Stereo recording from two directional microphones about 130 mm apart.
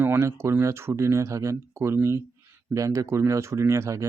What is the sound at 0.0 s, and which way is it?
Speech, 20° right (ahead or behind).